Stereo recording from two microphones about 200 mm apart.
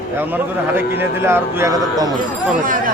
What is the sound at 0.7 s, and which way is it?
A man's voice, 10° right (ahead or behind).